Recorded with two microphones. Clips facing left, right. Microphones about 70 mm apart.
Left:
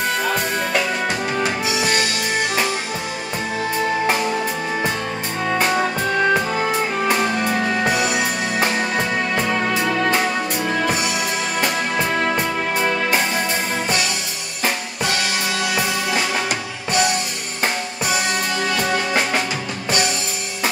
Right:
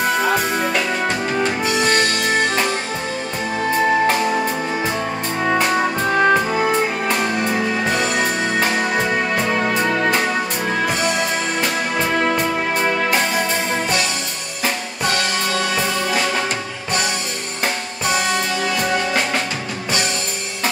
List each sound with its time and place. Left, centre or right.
0.2 s music: centre
1.4 s music: centre
5.6 s music: centre
6.0 s music: centre
8.9 s music: centre
18.0 s music: centre